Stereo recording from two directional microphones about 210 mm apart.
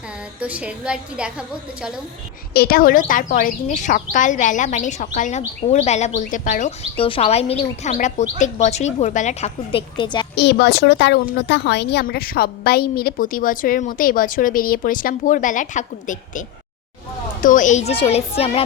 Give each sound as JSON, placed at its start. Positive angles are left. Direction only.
{"t": 0.3, "sound": "a woman's voice", "side_deg": -5}
{"t": 2.5, "sound": "speech", "side_deg": 45}
{"t": 10.3, "sound": "a woman's voice", "side_deg": 55}
{"t": 17.4, "sound": "speech", "side_deg": 40}